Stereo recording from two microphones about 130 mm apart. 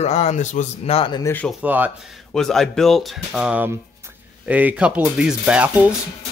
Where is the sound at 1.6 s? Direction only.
10° right (ahead or behind).